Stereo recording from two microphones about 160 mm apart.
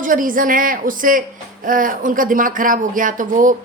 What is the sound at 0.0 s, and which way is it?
A woman's voice, 55° right (ahead or behind).